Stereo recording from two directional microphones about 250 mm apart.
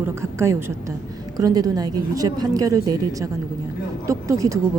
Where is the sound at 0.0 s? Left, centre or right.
Centre.